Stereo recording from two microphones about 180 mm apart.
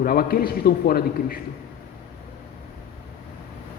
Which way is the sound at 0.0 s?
55° left (ahead or behind).